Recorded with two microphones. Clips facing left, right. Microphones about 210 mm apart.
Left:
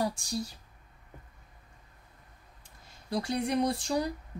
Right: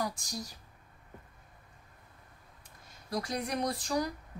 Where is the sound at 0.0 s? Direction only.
30° left (ahead or behind).